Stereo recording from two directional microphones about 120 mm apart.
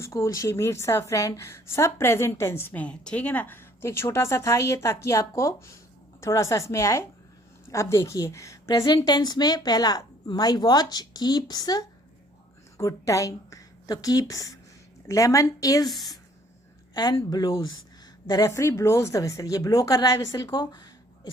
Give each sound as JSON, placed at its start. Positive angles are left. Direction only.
{"t": 0.0, "sound": "a woman's voice", "side_deg": 25}
{"t": 16.9, "sound": "a woman's voice", "side_deg": 35}
{"t": 18.3, "sound": "a woman's voice", "side_deg": 30}